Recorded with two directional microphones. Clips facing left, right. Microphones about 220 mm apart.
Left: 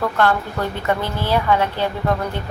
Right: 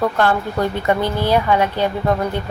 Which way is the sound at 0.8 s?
15° right (ahead or behind).